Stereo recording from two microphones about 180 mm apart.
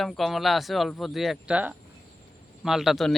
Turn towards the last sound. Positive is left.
turn(degrees=0)  # may be behind; listen again after turning